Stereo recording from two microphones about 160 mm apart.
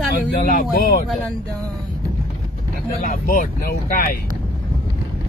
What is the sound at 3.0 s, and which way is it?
Speech, 60° left (ahead or behind).